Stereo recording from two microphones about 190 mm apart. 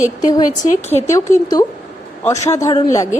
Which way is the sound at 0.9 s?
15° left (ahead or behind).